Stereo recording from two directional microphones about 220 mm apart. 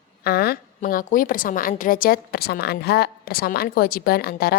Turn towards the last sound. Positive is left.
turn(degrees=45)  # may be behind; listen again after turning